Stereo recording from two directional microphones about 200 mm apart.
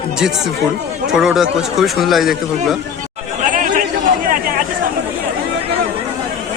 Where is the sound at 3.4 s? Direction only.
40° right (ahead or behind).